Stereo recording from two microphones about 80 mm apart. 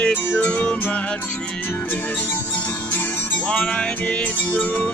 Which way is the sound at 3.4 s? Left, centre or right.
Centre.